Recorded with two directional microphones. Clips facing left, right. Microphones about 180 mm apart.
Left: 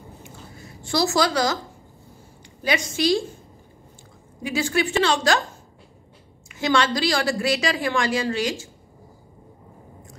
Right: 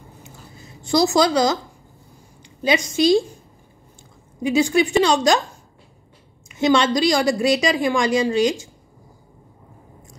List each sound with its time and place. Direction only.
0.2 s a sound: 20° right (ahead or behind)
2.6 s a woman's voice: 20° right (ahead or behind)
4.4 s a woman's voice: 20° right (ahead or behind)
6.5 s a woman's voice: 20° right (ahead or behind)